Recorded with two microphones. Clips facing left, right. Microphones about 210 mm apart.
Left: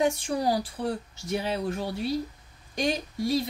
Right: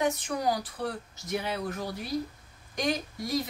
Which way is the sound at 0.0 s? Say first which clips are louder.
Left 3 dB; 30° left (ahead or behind).